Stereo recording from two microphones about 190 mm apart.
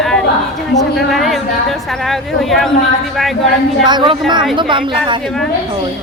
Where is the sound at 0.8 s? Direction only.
Centre (ahead or behind).